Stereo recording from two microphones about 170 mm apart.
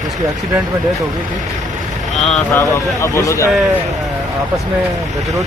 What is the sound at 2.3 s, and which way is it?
Speech, 15° left (ahead or behind).